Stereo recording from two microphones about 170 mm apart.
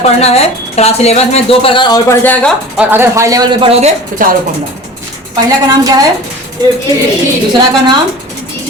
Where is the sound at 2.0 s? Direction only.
10° left (ahead or behind).